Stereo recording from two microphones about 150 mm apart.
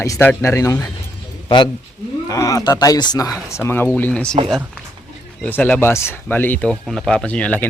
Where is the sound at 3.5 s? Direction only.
15° left (ahead or behind).